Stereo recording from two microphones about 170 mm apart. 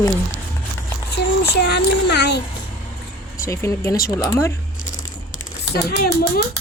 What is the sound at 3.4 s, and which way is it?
Speech, 15° left (ahead or behind).